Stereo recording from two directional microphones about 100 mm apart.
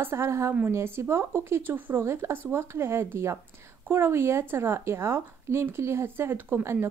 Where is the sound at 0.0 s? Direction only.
25° right (ahead or behind).